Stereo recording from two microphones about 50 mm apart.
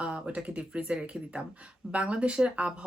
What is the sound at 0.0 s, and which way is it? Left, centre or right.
Speech, right.